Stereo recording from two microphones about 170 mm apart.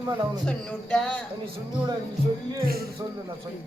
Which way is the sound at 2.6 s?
60° right (ahead or behind).